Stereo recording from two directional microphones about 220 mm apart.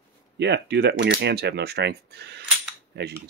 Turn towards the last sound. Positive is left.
turn(degrees=-50)  # may be behind; listen again after turning